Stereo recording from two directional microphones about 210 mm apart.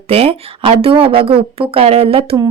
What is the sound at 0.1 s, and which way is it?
Speech, 30° right (ahead or behind).